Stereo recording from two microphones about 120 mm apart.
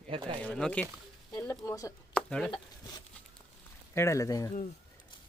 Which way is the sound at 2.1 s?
5° left (ahead or behind).